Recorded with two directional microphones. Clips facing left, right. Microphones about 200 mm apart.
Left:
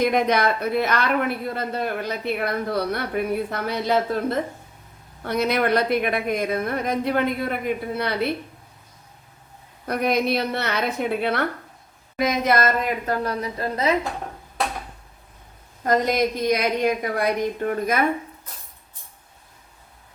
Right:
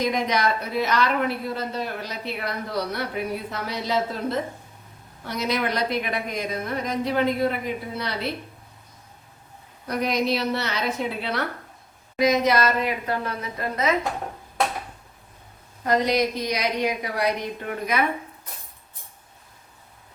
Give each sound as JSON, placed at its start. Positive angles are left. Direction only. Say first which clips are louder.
{"t": 0.0, "sound": "speech", "louder": "left 4 dB", "side_deg": 55}
{"t": 9.8, "sound": "a woman's voice", "louder": "left 2 dB", "side_deg": 55}
{"t": 15.8, "sound": "a woman's voice", "louder": "left 1 dB", "side_deg": 45}